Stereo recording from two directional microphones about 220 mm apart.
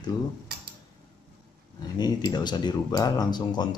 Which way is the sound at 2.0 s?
20° left (ahead or behind).